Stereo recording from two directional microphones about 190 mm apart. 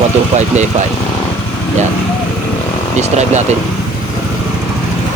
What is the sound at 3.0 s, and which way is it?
Speech, 35° right (ahead or behind).